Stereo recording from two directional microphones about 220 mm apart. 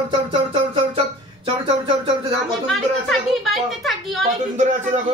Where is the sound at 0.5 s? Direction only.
25° right (ahead or behind).